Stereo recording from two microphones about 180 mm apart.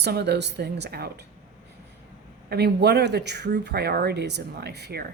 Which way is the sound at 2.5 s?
65° right (ahead or behind).